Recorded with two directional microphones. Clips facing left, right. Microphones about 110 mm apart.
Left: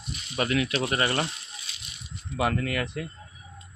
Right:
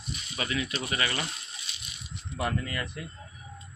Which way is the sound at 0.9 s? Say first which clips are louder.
Left 5 dB; 45° left (ahead or behind).